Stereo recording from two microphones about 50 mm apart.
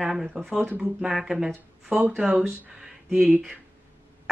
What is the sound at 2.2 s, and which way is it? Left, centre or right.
Speech, right.